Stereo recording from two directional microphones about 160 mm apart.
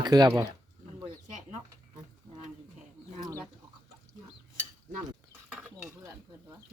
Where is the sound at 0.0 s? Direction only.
25° right (ahead or behind).